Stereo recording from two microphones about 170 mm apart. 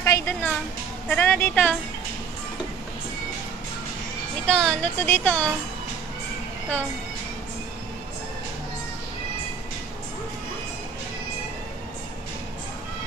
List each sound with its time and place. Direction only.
0.0 s a woman's voice: 15° left (ahead or behind)
4.5 s speech: 5° left (ahead or behind)